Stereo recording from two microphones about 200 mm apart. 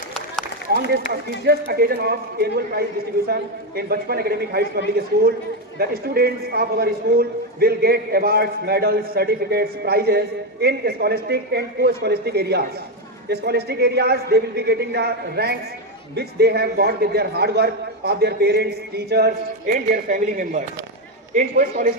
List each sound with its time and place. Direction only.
0.7 s a man's voice: 55° right (ahead or behind)
5.8 s a man's voice: 50° right (ahead or behind)